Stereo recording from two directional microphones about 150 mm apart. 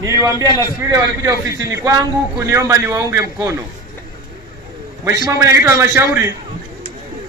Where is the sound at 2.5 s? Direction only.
20° right (ahead or behind).